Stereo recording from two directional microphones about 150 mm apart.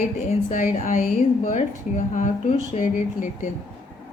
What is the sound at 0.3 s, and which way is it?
A woman's voice, 55° left (ahead or behind).